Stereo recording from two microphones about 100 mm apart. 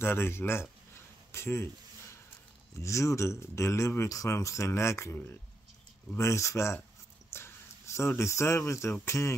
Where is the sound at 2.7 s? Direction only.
30° left (ahead or behind).